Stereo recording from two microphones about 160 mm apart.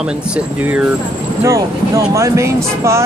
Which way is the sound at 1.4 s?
20° right (ahead or behind).